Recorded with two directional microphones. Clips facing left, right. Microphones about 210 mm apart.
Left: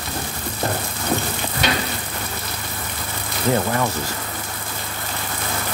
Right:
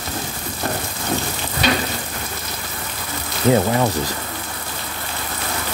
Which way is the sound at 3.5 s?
20° right (ahead or behind).